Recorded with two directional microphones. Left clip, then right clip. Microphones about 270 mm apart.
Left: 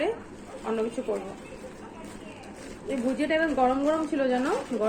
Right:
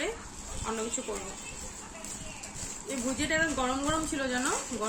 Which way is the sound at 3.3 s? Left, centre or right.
Centre.